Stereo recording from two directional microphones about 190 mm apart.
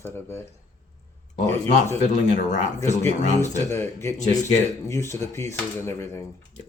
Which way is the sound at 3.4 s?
15° left (ahead or behind).